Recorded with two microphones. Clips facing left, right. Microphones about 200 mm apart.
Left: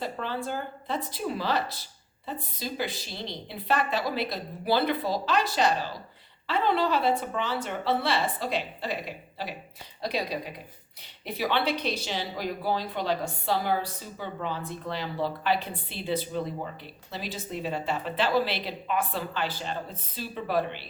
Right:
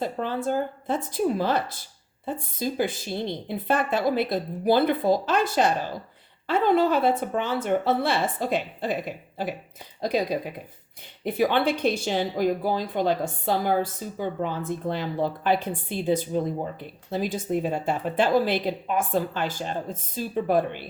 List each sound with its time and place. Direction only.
0.0 s speech: 45° right (ahead or behind)